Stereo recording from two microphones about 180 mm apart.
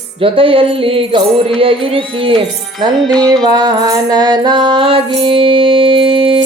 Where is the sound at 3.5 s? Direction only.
20° right (ahead or behind).